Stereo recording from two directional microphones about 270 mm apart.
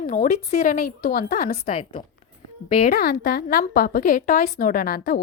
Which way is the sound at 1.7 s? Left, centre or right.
Left.